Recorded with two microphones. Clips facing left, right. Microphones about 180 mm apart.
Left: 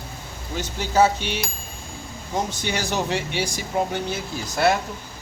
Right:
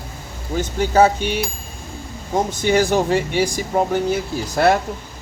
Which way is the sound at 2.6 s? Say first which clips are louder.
Right 9 dB; 50° right (ahead or behind).